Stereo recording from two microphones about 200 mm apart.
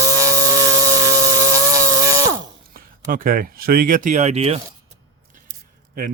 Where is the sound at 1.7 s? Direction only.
15° right (ahead or behind).